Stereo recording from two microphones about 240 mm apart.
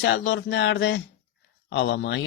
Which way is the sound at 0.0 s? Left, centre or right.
Left.